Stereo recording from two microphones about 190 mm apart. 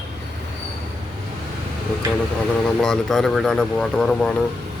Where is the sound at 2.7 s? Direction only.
Centre (ahead or behind).